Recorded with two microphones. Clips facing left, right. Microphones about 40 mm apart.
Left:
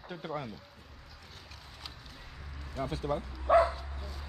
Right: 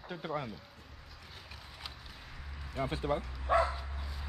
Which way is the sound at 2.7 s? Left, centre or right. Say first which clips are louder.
Even; right.